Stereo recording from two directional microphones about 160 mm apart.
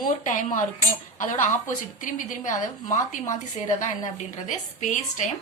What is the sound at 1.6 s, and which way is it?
A woman's voice, 55° left (ahead or behind).